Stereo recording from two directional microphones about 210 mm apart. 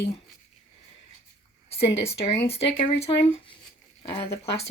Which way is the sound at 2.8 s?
25° left (ahead or behind).